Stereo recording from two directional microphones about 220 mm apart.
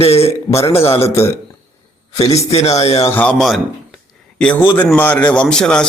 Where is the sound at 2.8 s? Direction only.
15° left (ahead or behind).